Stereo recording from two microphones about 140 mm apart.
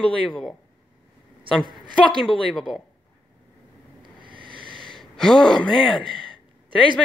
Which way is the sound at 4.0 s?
35° right (ahead or behind).